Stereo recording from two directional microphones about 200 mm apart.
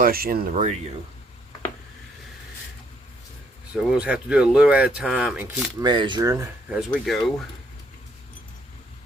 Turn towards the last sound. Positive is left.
turn(degrees=0)  # may be behind; listen again after turning